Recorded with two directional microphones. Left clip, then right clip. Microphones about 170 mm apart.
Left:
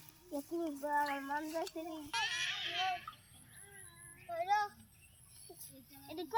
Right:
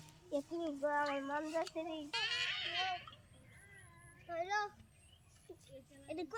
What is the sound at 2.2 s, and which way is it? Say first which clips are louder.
Babbling: left 1 dB; 5° right (ahead or behind).